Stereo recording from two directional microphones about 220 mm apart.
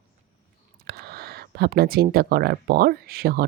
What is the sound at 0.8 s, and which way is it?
Speech, 45° right (ahead or behind).